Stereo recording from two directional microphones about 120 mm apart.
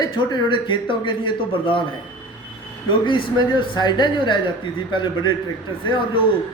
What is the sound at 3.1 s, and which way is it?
Speech, 45° left (ahead or behind).